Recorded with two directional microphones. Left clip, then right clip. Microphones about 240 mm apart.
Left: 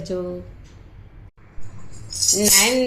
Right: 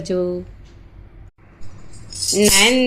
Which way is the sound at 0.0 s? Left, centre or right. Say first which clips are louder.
Right 6 dB; right.